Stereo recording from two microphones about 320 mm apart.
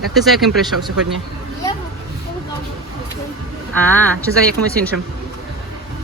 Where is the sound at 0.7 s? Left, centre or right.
Right.